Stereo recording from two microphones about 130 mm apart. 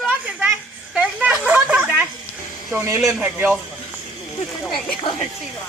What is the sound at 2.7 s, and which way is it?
Speech, 20° right (ahead or behind).